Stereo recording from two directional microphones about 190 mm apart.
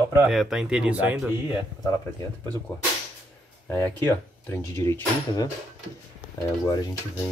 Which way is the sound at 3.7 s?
10° left (ahead or behind).